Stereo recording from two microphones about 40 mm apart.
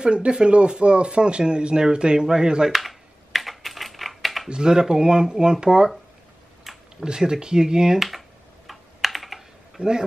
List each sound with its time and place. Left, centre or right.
0.0 s speech: right
2.7 s typing: centre
4.5 s speech: centre
6.7 s a sound: centre
7.0 s speech: centre
8.6 s computer keyboard: centre
9.8 s speech: centre